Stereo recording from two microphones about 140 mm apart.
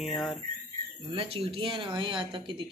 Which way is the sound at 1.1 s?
40° right (ahead or behind).